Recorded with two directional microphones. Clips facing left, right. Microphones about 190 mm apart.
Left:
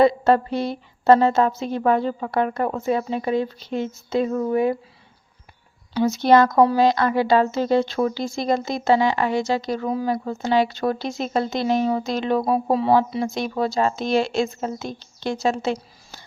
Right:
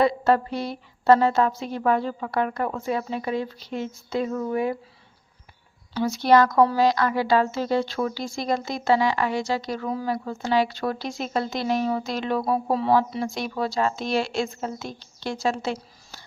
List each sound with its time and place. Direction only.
0.0 s speech: 25° left (ahead or behind)
5.9 s speech: 20° left (ahead or behind)